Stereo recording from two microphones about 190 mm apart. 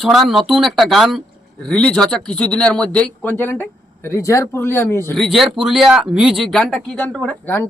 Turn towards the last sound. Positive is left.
turn(degrees=10)  # may be behind; listen again after turning